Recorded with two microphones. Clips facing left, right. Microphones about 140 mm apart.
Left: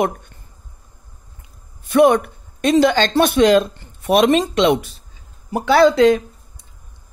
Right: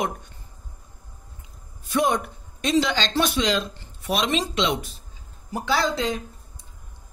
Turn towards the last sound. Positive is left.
turn(degrees=70)  # may be behind; listen again after turning